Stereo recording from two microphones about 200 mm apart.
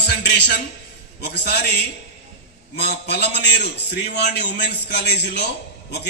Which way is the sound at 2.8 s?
55° left (ahead or behind).